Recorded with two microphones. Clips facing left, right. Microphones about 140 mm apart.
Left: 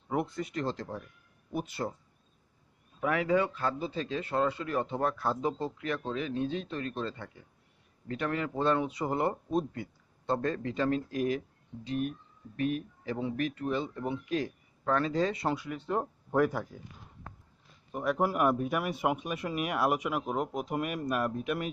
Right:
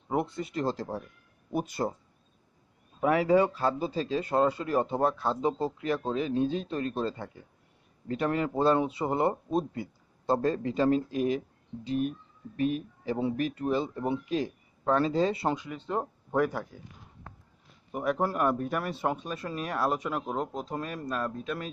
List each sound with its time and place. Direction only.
0.3 s speech: 30° right (ahead or behind)
3.0 s a man's voice: 30° right (ahead or behind)
15.5 s speech: 15° right (ahead or behind)
17.9 s speech: centre (ahead or behind)
18.2 s speech: 10° left (ahead or behind)